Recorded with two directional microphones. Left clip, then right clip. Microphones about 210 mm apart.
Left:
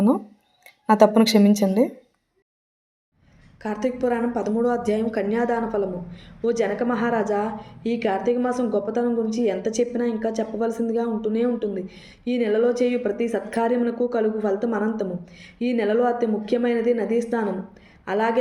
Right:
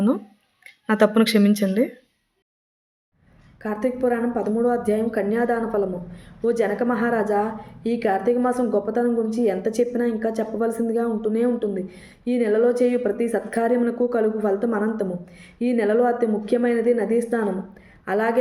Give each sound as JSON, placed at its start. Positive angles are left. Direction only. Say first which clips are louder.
{"t": 0.6, "sound": "a sound", "louder": "left 4 dB", "side_deg": 0}
{"t": 1.5, "sound": "a woman's voice", "louder": "left 1 dB", "side_deg": 0}
{"t": 3.6, "sound": "a woman's voice", "louder": "right 1 dB", "side_deg": 0}